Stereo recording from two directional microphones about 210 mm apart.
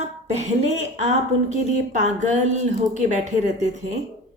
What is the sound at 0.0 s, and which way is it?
Speech, 30° right (ahead or behind).